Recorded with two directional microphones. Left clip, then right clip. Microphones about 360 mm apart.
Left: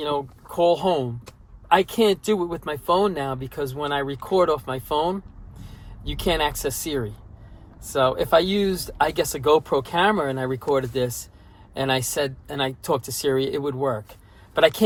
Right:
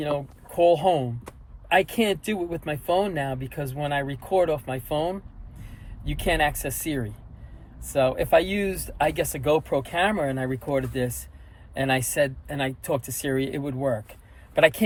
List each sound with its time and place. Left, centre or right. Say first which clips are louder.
0.0 s speech: left 2 dB; centre
7.9 s speech: left 2 dB; centre
12.5 s speech: left 3 dB; centre